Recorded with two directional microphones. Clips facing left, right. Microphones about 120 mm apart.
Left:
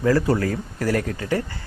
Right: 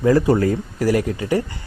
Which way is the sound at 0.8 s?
10° right (ahead or behind).